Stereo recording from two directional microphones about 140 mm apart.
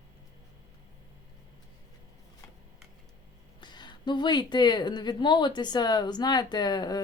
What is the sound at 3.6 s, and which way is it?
Speech, 30° left (ahead or behind).